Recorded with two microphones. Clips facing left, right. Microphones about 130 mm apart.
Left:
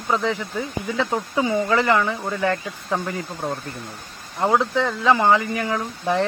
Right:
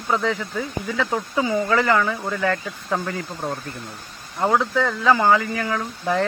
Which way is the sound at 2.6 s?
15° left (ahead or behind).